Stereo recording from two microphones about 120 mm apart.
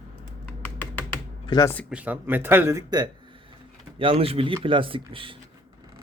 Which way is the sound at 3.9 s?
50° right (ahead or behind).